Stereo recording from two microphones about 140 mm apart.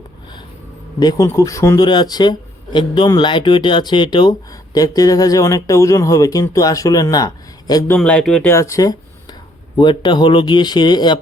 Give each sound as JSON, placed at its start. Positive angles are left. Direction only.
{"t": 0.9, "sound": "speech", "side_deg": 25}
{"t": 7.9, "sound": "speech", "side_deg": 10}
{"t": 8.5, "sound": "speech", "side_deg": 20}